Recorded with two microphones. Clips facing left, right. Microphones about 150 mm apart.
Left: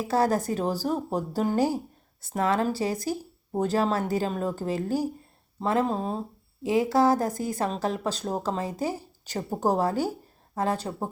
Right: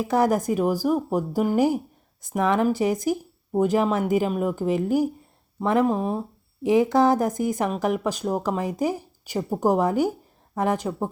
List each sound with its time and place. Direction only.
0.0 s speech: 15° right (ahead or behind)